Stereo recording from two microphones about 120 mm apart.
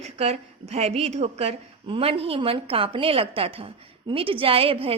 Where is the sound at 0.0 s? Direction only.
60° right (ahead or behind).